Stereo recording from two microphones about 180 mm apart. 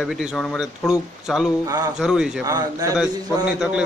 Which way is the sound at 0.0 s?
Centre (ahead or behind).